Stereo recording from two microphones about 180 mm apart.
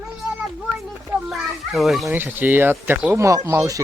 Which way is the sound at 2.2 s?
10° right (ahead or behind).